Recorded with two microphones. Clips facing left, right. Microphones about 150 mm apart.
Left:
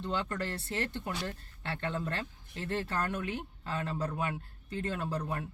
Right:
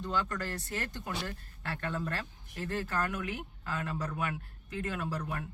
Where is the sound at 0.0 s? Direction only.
30° left (ahead or behind).